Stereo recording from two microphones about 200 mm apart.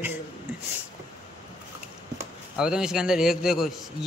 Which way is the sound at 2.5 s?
5° right (ahead or behind).